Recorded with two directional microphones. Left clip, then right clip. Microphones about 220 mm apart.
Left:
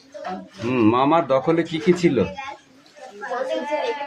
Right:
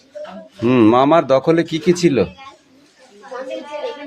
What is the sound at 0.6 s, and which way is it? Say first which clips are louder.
Speech: right 6 dB; 35° right (ahead or behind).